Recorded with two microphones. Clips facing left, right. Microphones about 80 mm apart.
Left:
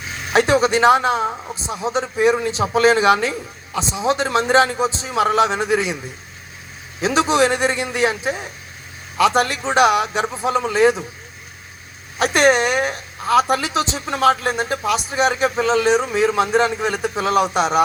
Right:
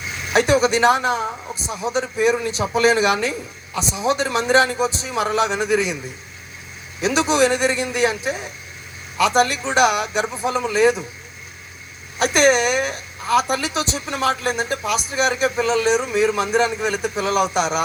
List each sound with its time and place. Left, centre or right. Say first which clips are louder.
0.3 s a man's voice: left 1 dB; left
7.0 s a man's voice: left 1 dB; left
12.2 s speech: left 1 dB; left